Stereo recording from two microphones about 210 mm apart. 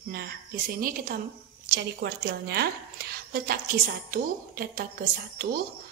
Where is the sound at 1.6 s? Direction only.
50° right (ahead or behind).